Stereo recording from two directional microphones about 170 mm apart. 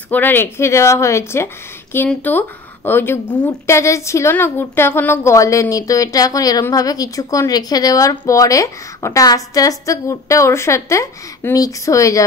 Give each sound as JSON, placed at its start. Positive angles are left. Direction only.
{"t": 0.1, "sound": "a woman's voice", "side_deg": 10}